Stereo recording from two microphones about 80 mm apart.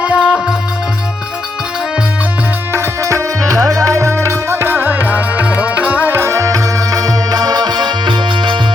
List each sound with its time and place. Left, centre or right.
0.0 s music: centre
2.7 s music: right